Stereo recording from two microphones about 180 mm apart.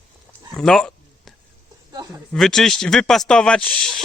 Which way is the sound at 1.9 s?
20° right (ahead or behind).